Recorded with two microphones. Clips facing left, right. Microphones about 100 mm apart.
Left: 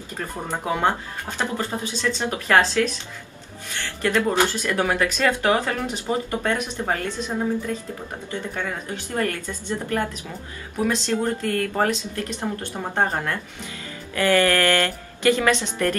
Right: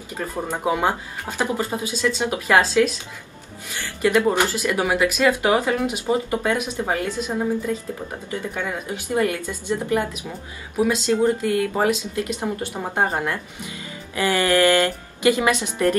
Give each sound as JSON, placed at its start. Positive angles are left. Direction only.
{"t": 0.2, "sound": "speech", "side_deg": -15}